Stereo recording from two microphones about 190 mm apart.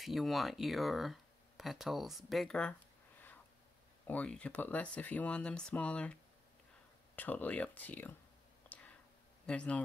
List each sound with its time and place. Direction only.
0.0 s speech: centre (ahead or behind)
4.1 s speech: 5° left (ahead or behind)
7.2 s speech: 10° left (ahead or behind)
9.5 s speech: 5° left (ahead or behind)